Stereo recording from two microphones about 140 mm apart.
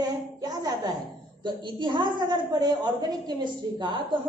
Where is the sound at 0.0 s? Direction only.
30° right (ahead or behind).